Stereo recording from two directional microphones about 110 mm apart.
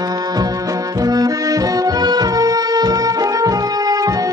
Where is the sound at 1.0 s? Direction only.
35° right (ahead or behind).